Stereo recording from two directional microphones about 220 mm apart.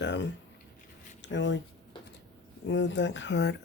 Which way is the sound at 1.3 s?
55° left (ahead or behind).